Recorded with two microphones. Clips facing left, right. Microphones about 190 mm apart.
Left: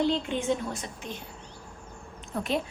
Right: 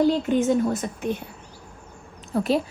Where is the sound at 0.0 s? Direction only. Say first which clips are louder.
Right 7 dB; 45° right (ahead or behind).